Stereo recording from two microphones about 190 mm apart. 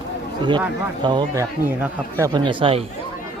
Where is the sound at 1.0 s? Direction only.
25° right (ahead or behind).